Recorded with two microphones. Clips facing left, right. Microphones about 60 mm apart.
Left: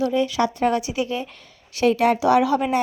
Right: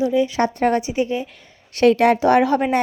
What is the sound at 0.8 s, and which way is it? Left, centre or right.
Speech, right.